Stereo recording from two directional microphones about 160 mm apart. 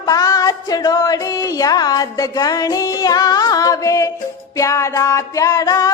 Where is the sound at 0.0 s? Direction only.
20° left (ahead or behind).